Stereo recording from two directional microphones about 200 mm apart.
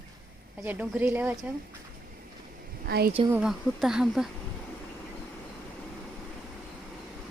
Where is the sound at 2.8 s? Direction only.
50° right (ahead or behind).